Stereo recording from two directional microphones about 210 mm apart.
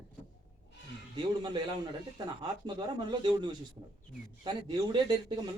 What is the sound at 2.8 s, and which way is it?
Speech, 20° right (ahead or behind).